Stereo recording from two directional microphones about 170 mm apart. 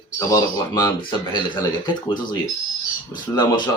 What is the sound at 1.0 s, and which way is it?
Speech, 25° left (ahead or behind).